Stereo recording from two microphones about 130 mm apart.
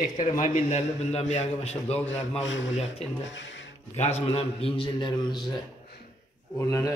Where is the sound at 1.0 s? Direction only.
60° left (ahead or behind).